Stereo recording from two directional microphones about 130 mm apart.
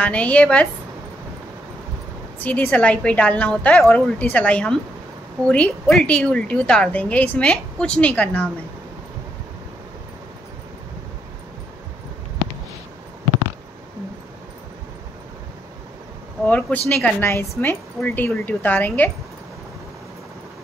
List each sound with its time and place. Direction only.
0.0 s a woman's voice: 10° left (ahead or behind)
2.3 s a woman's voice: 15° left (ahead or behind)
16.4 s a woman's voice: 10° left (ahead or behind)